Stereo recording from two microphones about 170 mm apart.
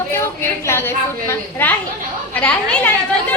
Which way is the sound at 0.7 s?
15° left (ahead or behind).